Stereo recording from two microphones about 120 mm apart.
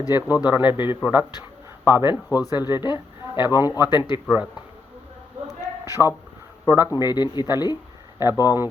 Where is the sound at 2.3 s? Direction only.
30° left (ahead or behind).